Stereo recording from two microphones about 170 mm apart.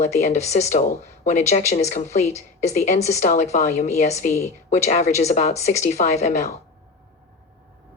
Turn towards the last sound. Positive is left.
turn(degrees=45)  # may be behind; listen again after turning